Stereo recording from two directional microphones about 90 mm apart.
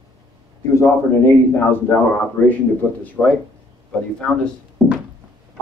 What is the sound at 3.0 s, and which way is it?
Speech, 15° left (ahead or behind).